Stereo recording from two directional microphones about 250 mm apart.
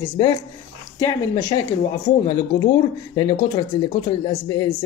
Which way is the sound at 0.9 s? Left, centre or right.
Centre.